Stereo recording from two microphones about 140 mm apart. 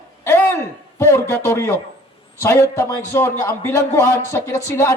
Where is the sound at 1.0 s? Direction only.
20° left (ahead or behind).